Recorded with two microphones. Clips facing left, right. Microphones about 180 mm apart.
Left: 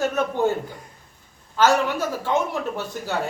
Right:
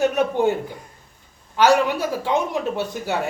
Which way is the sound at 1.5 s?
15° right (ahead or behind).